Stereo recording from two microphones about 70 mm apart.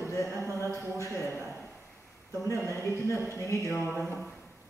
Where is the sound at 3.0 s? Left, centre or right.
Left.